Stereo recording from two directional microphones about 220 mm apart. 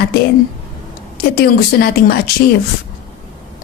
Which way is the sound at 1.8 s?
45° left (ahead or behind).